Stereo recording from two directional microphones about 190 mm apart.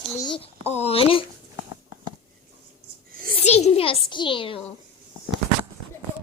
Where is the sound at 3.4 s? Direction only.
35° left (ahead or behind).